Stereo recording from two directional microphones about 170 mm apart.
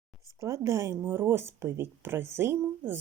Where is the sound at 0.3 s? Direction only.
20° right (ahead or behind).